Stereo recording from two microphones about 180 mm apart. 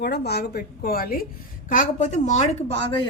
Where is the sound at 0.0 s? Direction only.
65° left (ahead or behind).